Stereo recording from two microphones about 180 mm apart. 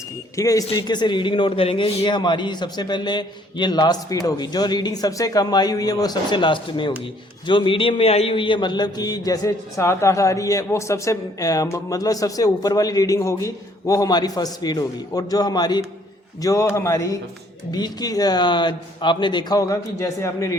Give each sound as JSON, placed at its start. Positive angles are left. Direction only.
{"t": 0.3, "sound": "a man's voice", "side_deg": 20}